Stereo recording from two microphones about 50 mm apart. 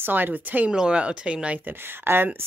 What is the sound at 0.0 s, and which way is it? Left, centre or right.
Speech, right.